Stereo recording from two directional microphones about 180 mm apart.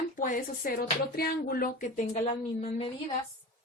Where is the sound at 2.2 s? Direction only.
30° left (ahead or behind).